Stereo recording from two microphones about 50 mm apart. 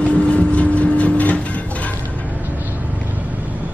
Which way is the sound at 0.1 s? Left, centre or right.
Left.